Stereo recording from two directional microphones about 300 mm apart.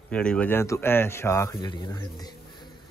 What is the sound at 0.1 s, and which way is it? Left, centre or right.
Speech, centre.